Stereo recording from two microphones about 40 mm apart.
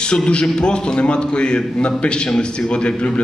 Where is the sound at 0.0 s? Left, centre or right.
Left.